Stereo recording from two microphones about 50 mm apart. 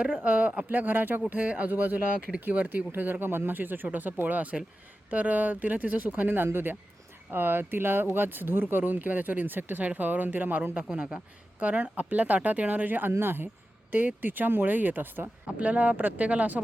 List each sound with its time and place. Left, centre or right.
0.3 s speech: right
10.8 s a man's voice: right
15.5 s speech: right